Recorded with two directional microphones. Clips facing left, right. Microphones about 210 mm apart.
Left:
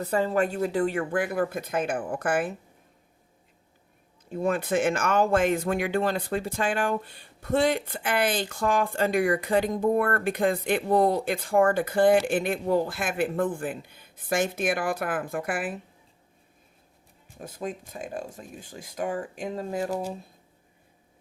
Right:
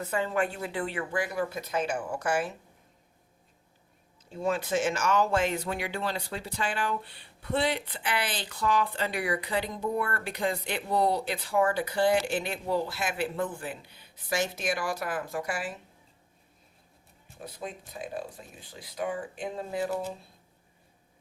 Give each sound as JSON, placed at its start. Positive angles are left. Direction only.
{"t": 0.0, "sound": "speech", "side_deg": 35}
{"t": 4.3, "sound": "speech", "side_deg": 55}
{"t": 17.4, "sound": "speech", "side_deg": 45}